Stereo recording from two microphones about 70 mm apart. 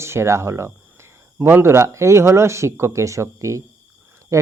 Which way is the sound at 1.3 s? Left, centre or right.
Right.